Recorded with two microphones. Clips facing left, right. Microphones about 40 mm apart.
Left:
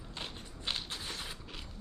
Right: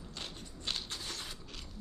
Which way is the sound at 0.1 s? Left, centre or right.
Left.